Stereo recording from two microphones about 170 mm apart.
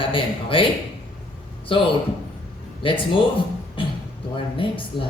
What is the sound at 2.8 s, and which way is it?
Speech, 30° left (ahead or behind).